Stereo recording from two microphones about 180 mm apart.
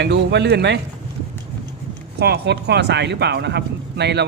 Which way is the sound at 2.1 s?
65° right (ahead or behind).